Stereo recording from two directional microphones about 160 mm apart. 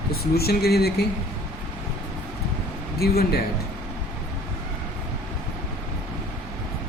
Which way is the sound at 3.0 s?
75° left (ahead or behind).